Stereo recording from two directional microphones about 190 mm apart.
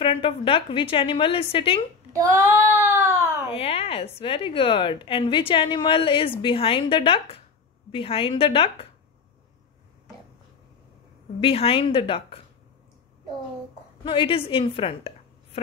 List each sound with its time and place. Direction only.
0.0 s a woman's voice: 30° left (ahead or behind)
2.1 s child singing: 15° right (ahead or behind)
3.4 s a woman's voice: 30° left (ahead or behind)
11.4 s a woman's voice: 30° left (ahead or behind)
14.0 s a woman's voice: 25° left (ahead or behind)